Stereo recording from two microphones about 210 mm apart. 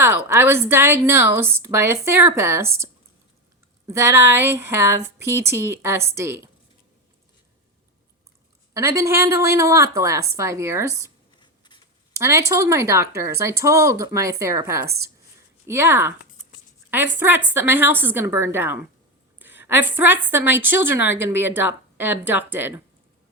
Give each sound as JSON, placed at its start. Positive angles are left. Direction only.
{"t": 0.3, "sound": "speech", "side_deg": -10}
{"t": 8.7, "sound": "speech", "side_deg": -15}
{"t": 11.3, "sound": "scissors", "side_deg": 20}
{"t": 12.1, "sound": "speech", "side_deg": -15}